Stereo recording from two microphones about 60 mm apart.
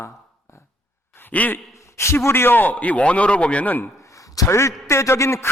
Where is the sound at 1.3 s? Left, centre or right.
Left.